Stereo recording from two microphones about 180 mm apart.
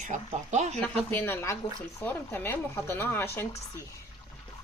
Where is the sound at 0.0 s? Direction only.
40° right (ahead or behind).